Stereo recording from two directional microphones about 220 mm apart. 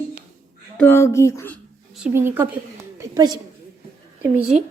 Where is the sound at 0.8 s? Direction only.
10° left (ahead or behind).